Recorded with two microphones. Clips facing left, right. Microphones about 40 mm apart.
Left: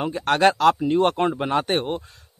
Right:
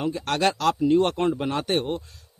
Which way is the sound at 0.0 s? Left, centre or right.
Left.